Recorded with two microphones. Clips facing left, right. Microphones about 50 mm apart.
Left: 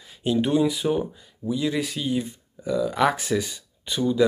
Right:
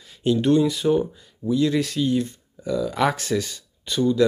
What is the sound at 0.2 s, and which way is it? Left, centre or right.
Speech, centre.